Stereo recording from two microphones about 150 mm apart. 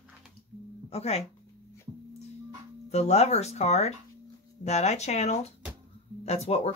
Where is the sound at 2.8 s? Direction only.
45° left (ahead or behind).